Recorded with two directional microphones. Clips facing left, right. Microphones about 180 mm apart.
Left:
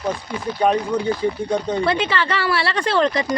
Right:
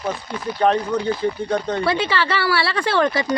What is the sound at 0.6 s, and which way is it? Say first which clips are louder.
Speech: even; 10° left (ahead or behind).